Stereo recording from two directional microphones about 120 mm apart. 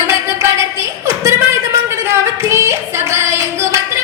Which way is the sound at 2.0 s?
25° right (ahead or behind).